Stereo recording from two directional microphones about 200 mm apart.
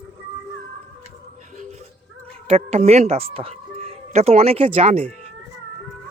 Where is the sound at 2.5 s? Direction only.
30° right (ahead or behind).